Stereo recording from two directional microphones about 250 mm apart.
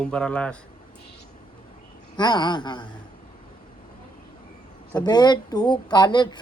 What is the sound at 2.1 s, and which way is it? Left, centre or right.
Speech, centre.